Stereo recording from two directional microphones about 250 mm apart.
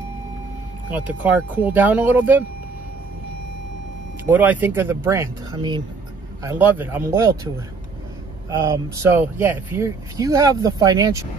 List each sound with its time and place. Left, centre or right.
0.8 s speech: centre
4.3 s speech: centre